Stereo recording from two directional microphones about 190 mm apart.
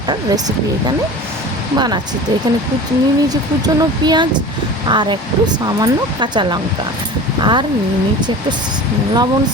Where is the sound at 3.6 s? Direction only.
20° right (ahead or behind).